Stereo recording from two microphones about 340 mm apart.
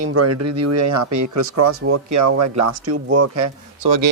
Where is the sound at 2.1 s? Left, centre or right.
Right.